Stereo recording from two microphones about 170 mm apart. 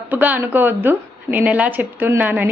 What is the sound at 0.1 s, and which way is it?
Speech, 10° right (ahead or behind).